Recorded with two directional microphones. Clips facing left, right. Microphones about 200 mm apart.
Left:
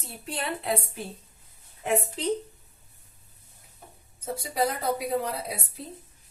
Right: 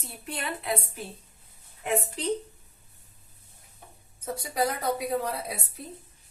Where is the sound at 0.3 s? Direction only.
30° left (ahead or behind).